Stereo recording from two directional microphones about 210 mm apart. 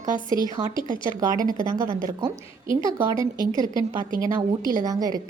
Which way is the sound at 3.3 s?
20° left (ahead or behind).